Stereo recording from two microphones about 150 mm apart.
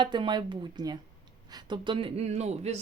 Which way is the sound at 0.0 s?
30° right (ahead or behind).